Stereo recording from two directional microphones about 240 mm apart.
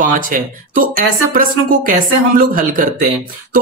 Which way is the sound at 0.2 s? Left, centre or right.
Right.